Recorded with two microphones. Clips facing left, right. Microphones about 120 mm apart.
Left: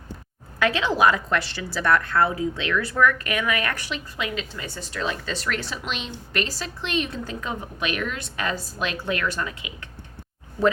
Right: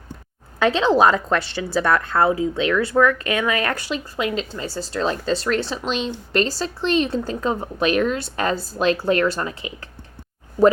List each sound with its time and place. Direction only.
0.6 s a woman's voice: 25° right (ahead or behind)